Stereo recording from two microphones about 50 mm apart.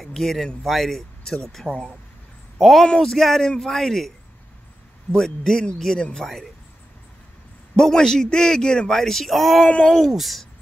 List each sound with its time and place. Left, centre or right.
0.0 s speech: centre
1.6 s speech: centre
2.6 s a woman's voice: centre
5.1 s a woman's voice: centre
7.7 s speech: centre
9.7 s speech: left
10.1 s a woman's voice: centre